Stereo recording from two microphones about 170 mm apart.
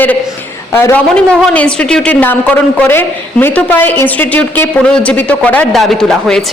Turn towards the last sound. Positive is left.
turn(degrees=5)  # may be behind; listen again after turning